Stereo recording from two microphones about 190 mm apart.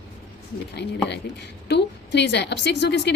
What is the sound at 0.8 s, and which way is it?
A woman's voice, 60° left (ahead or behind).